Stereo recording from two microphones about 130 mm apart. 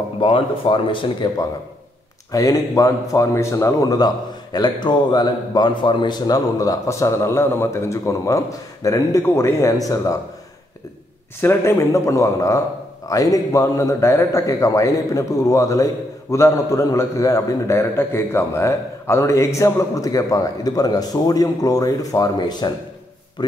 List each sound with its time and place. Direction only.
0.2 s speech: 40° left (ahead or behind)
2.3 s a man's voice: 25° left (ahead or behind)
11.4 s a man's voice: 20° left (ahead or behind)